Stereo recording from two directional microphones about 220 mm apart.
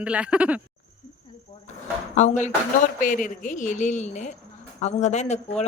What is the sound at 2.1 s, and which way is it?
A woman's voice, 35° left (ahead or behind).